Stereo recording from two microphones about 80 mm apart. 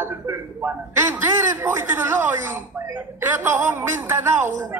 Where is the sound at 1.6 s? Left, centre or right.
Right.